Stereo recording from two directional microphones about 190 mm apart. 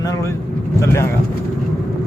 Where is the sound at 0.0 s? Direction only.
15° left (ahead or behind).